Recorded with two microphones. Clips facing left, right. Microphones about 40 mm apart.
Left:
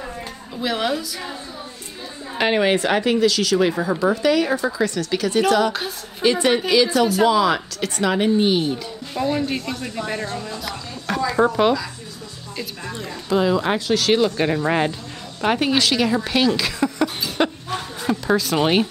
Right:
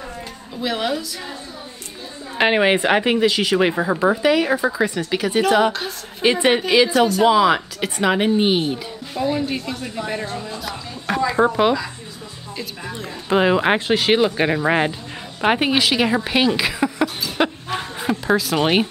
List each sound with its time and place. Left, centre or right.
0.6 s a woman's voice: centre
2.3 s speech: centre
5.7 s a woman's voice: centre
6.2 s speech: right
9.2 s a woman's voice: centre
13.3 s speech: right; by 17.1 s centre
17.4 s chuckle: centre